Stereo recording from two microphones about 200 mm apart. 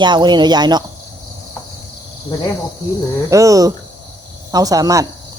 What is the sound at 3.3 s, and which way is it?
Speech, 15° right (ahead or behind).